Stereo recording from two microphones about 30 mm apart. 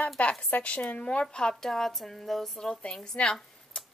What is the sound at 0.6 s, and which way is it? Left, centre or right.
Speech, left.